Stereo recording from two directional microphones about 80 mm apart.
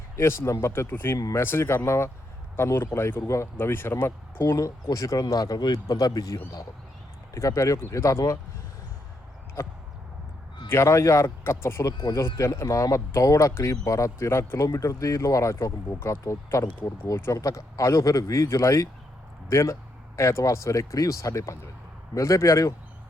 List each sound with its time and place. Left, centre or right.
0.2 s speech: left
7.3 s speech: left
9.6 s speech: left